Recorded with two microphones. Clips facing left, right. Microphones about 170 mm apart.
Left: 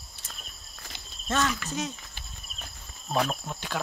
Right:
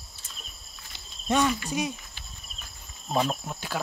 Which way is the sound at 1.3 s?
15° right (ahead or behind).